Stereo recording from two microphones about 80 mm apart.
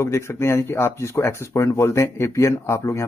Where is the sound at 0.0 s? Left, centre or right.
Left.